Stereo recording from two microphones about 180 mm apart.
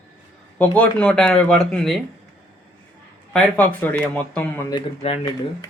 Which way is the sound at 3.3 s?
5° left (ahead or behind).